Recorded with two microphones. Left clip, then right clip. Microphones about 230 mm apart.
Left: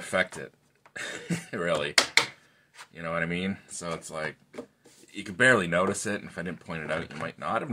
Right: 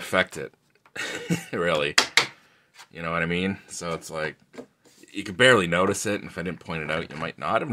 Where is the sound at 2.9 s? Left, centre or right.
Right.